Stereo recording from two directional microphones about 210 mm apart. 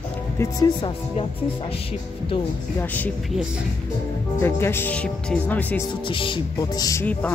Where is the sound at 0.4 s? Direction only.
20° left (ahead or behind).